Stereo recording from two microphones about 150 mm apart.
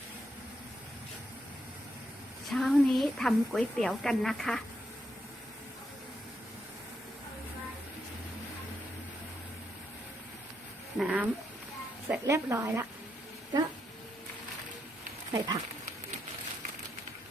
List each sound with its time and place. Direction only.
2.5 s a woman's voice: centre (ahead or behind)
10.9 s speech: 10° right (ahead or behind)
15.3 s speech: 30° right (ahead or behind)